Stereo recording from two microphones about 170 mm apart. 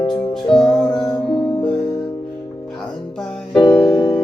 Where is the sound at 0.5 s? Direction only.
5° left (ahead or behind).